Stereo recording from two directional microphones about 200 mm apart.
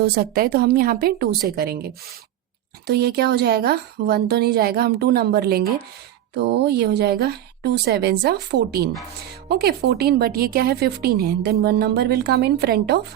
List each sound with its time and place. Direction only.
0.0 s a woman's voice: 50° right (ahead or behind)